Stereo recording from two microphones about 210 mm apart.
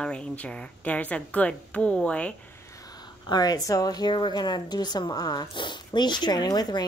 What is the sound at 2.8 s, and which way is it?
Speech, 20° left (ahead or behind).